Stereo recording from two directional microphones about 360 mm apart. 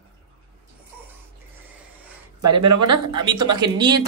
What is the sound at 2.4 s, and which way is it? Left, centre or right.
Speech, right.